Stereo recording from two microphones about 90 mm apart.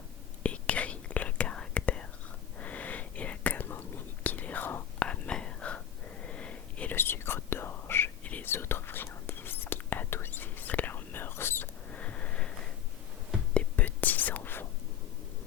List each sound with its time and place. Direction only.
0.4 s whispering: 15° left (ahead or behind)
6.9 s whispering: 25° left (ahead or behind)